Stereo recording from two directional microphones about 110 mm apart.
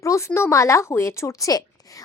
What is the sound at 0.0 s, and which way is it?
Speech, 25° left (ahead or behind).